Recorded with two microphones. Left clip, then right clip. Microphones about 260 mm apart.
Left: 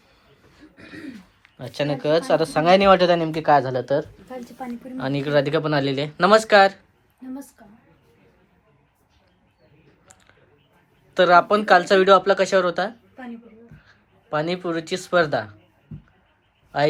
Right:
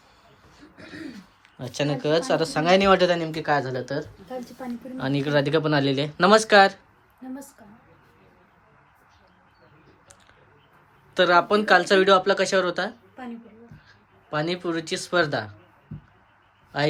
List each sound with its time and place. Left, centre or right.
1.4 s speech: centre
11.1 s speech: centre
14.3 s speech: centre
16.7 s speech: centre